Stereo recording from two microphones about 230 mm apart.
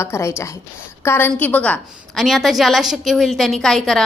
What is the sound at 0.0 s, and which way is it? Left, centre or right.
A woman's voice, centre.